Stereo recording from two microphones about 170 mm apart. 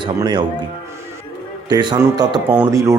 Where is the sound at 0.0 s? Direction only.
30° right (ahead or behind).